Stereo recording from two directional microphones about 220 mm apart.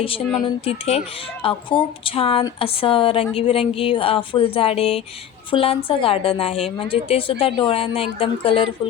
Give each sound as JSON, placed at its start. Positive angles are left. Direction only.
{"t": 0.4, "sound": "a woman's voice", "side_deg": 25}